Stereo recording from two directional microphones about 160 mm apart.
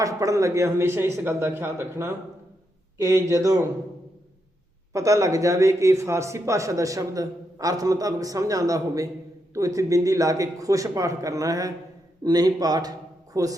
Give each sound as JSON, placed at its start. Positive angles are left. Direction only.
{"t": 0.0, "sound": "a man's voice", "side_deg": -20}
{"t": 4.9, "sound": "speech", "side_deg": -20}